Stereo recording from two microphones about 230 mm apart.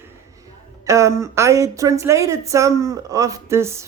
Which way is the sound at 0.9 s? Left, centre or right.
Centre.